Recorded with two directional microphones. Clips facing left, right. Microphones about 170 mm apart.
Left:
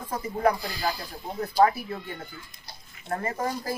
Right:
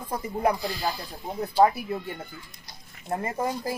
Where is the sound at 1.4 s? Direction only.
20° right (ahead or behind).